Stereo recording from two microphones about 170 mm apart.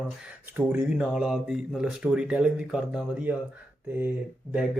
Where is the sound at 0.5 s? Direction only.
10° right (ahead or behind).